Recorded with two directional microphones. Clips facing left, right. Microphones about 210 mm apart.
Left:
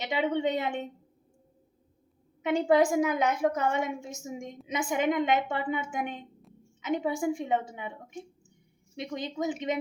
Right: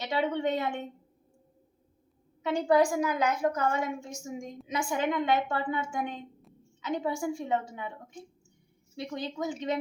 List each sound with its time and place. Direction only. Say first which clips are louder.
0.0 s a woman's voice: left 1 dB; 20° left (ahead or behind)
2.4 s a woman's voice: left 1 dB; 20° left (ahead or behind)